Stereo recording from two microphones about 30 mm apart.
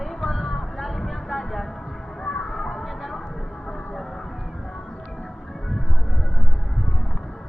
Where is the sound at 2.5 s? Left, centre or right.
Centre.